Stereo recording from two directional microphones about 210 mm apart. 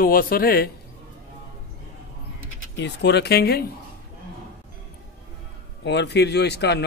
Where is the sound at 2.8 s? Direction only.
55° left (ahead or behind).